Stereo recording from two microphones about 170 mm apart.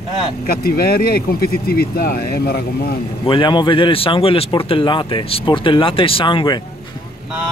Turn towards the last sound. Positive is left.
turn(degrees=30)  # may be behind; listen again after turning